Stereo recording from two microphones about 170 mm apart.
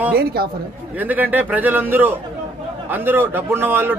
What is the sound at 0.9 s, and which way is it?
Speech, 10° right (ahead or behind).